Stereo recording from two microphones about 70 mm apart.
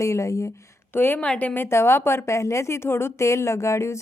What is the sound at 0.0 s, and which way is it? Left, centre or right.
Speech, left.